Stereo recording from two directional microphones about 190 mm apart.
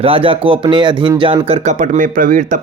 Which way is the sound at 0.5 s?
25° right (ahead or behind).